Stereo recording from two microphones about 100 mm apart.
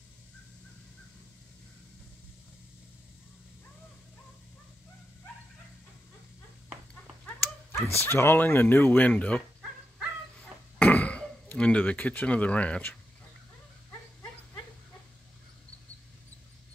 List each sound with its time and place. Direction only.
7.7 s speech: 25° left (ahead or behind)
10.8 s speech: 15° left (ahead or behind)